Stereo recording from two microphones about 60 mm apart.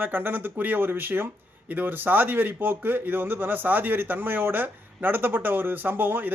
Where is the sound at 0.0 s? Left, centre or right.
Right.